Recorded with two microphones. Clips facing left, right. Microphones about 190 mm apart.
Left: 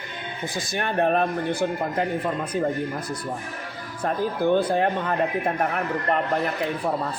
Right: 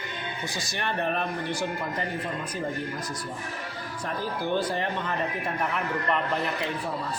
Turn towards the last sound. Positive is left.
turn(degrees=50)  # may be behind; listen again after turning